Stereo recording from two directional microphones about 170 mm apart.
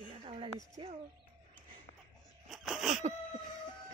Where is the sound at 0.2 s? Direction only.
35° right (ahead or behind).